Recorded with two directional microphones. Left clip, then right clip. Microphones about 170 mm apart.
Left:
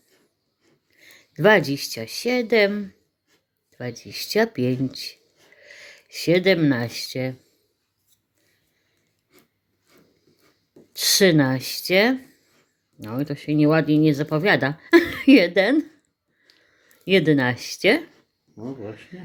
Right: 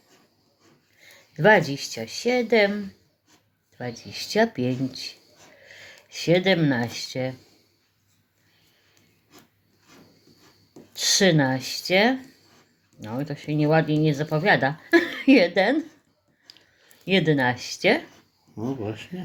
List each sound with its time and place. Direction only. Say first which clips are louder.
0.9 s speech: left 3 dB; 40° left (ahead or behind)
10.9 s speech: left 3 dB; 45° left (ahead or behind)
17.1 s speech: left 3 dB; 40° left (ahead or behind)
18.8 s speech: right 3 dB; 35° right (ahead or behind)